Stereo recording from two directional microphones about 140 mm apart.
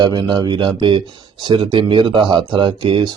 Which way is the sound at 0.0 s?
30° right (ahead or behind).